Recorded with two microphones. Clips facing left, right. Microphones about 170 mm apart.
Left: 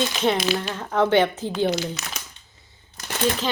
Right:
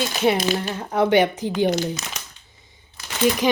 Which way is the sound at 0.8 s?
15° right (ahead or behind).